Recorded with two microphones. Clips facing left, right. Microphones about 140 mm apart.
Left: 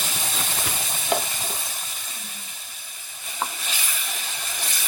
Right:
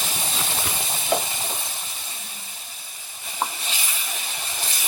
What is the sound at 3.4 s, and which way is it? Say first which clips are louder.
Stir: right 2 dB; 30° right (ahead or behind).